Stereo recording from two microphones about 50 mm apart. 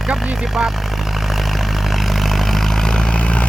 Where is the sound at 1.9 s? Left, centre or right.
Centre; by 3.4 s left.